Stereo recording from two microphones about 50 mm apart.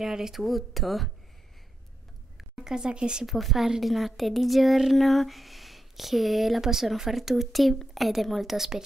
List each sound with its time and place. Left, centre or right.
0.0 s a woman's voice: centre
2.6 s a woman's voice: centre
3.3 s a woman's voice: centre